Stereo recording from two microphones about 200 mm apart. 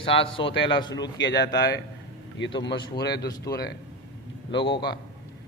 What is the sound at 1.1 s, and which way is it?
A man's voice, 60° left (ahead or behind).